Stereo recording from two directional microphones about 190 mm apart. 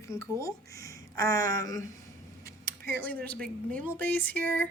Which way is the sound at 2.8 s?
10° left (ahead or behind).